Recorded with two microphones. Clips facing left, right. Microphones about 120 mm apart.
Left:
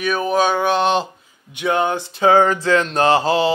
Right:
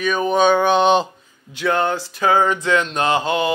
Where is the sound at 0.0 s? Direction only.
5° left (ahead or behind).